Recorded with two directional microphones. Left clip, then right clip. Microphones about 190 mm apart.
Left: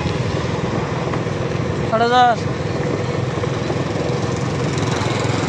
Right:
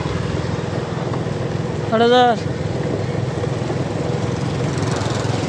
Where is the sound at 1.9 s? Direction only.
60° right (ahead or behind).